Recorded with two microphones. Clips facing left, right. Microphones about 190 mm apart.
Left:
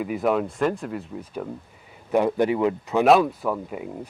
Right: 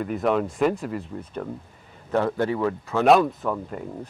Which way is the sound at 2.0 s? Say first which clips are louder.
Left 3 dB; 15° left (ahead or behind).